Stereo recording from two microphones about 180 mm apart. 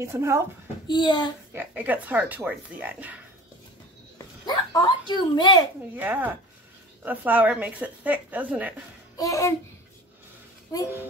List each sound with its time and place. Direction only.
0.0 s speech: 15° right (ahead or behind)
0.8 s speech: 25° left (ahead or behind)
1.5 s speech: 10° right (ahead or behind)
4.5 s speech: 25° left (ahead or behind)
5.9 s speech: 10° right (ahead or behind)
9.1 s a child's voice: 20° left (ahead or behind)